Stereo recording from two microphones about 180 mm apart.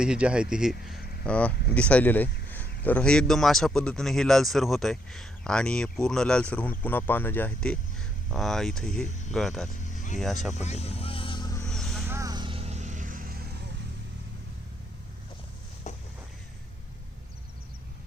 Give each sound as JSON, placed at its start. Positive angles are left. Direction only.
{"t": 0.0, "sound": "speech", "side_deg": -5}
{"t": 10.5, "sound": "vehicle", "side_deg": 40}
{"t": 11.6, "sound": "a sound", "side_deg": 0}
{"t": 12.0, "sound": "vehicle", "side_deg": -15}